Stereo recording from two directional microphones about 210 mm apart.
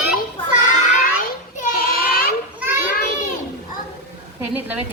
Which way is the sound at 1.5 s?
40° left (ahead or behind).